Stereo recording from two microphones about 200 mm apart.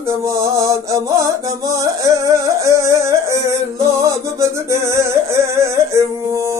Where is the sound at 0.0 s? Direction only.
15° right (ahead or behind).